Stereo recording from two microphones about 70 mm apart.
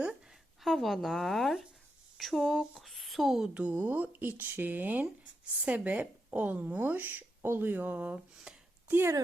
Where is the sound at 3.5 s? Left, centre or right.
Centre.